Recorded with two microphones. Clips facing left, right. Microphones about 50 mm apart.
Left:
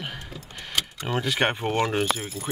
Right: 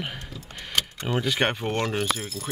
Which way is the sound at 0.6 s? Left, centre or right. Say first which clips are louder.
Right 1 dB; centre.